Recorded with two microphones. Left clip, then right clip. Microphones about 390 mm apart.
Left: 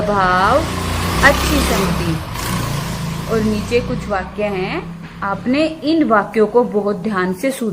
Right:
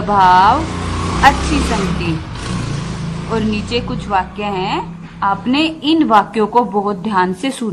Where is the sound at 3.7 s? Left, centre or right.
Centre.